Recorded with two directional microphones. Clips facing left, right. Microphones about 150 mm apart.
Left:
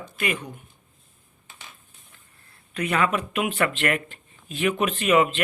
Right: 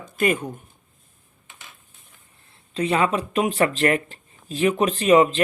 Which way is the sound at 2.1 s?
25° right (ahead or behind).